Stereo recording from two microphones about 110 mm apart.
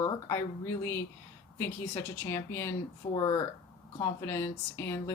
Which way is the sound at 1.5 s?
25° left (ahead or behind).